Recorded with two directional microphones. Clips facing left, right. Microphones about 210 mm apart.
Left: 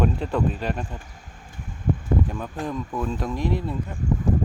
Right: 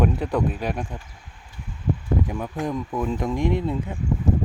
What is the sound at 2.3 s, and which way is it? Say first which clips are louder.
Speech: right 3 dB; 15° right (ahead or behind).